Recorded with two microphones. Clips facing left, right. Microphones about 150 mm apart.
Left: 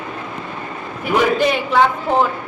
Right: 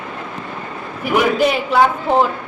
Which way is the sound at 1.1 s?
5° right (ahead or behind).